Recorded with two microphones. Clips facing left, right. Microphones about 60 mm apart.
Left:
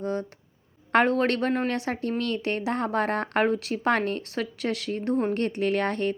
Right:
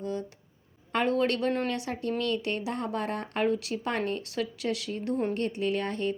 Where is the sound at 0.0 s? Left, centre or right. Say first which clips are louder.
Left 4 dB; left.